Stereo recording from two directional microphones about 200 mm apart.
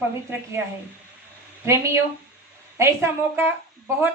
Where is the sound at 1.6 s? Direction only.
15° right (ahead or behind).